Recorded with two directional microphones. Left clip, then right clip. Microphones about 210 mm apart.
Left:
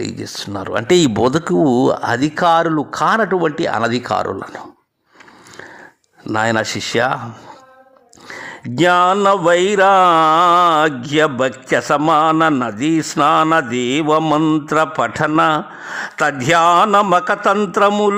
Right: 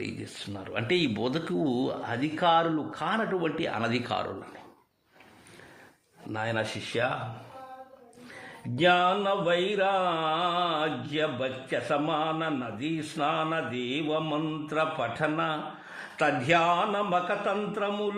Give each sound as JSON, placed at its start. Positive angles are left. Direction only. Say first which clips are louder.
{"t": 0.0, "sound": "speech", "louder": "left 12 dB", "side_deg": 35}
{"t": 6.3, "sound": "speech", "louder": "left 14 dB", "side_deg": 45}
{"t": 8.7, "sound": "speech", "louder": "left 11 dB", "side_deg": 45}